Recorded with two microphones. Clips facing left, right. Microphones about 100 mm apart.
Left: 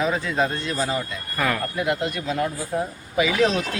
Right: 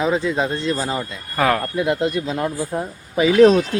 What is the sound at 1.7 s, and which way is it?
A man's voice, 25° right (ahead or behind).